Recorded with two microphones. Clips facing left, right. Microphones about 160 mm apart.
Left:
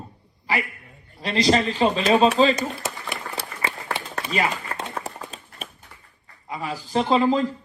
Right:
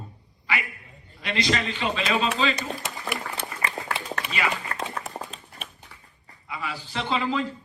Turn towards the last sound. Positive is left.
turn(degrees=40)  # may be behind; listen again after turning